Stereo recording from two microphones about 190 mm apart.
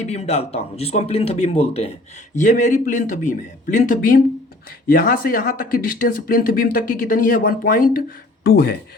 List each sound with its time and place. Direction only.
0.0 s speech: 35° left (ahead or behind); by 8.7 s 60° left (ahead or behind)